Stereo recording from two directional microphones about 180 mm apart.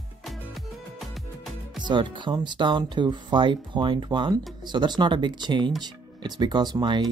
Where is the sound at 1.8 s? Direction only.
25° right (ahead or behind).